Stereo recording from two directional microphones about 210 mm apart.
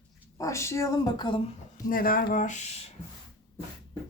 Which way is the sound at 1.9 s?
40° left (ahead or behind).